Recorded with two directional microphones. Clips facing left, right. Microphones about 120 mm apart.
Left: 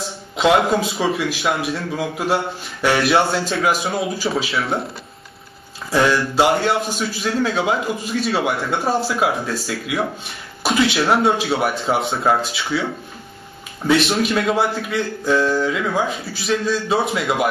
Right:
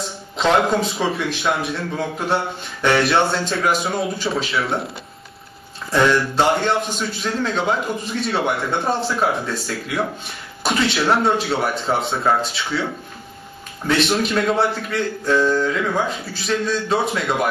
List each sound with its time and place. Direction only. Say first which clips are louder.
0.4 s a man's voice: left 1 dB; 5° left (ahead or behind)
5.9 s a man's voice: even; 5° left (ahead or behind)
17.1 s a man's voice: left 1 dB; 5° left (ahead or behind)